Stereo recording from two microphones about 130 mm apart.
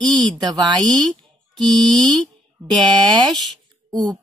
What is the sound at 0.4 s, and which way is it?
Speech, 30° right (ahead or behind).